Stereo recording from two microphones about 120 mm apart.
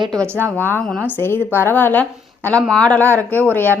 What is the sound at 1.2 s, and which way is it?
Speech, 20° left (ahead or behind).